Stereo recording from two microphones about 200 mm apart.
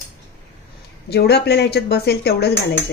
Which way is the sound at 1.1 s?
55° left (ahead or behind).